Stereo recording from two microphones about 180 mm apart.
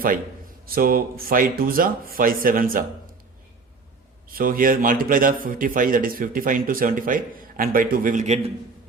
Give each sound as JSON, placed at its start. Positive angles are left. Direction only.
{"t": 0.6, "sound": "a man's voice", "side_deg": -55}
{"t": 4.3, "sound": "a man's voice", "side_deg": -55}